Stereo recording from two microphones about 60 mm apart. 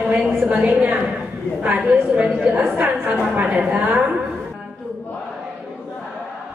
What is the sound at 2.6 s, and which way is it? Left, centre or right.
A woman's voice, right.